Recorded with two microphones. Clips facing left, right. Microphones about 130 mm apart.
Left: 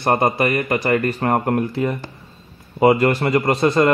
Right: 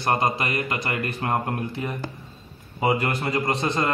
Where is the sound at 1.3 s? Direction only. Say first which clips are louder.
Left 7 dB; 75° left (ahead or behind).